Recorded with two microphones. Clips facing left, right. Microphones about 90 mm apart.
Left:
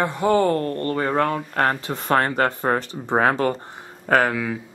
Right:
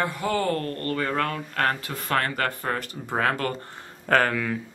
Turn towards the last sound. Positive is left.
turn(degrees=10)  # may be behind; listen again after turning